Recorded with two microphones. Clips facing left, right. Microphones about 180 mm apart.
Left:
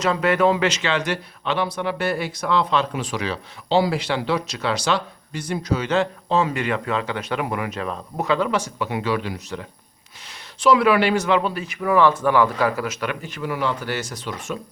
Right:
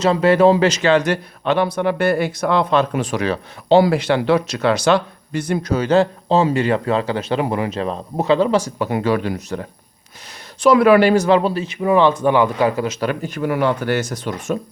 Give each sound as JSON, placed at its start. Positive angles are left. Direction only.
{"t": 0.0, "sound": "speech", "side_deg": -30}
{"t": 8.8, "sound": "speech", "side_deg": -45}
{"t": 13.1, "sound": "speech", "side_deg": -45}